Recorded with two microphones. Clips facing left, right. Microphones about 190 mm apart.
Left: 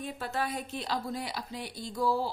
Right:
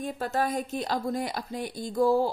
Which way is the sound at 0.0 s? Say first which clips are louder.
Right 5 dB; 45° right (ahead or behind).